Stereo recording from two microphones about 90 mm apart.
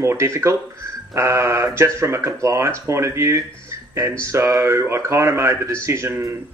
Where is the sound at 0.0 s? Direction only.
30° right (ahead or behind).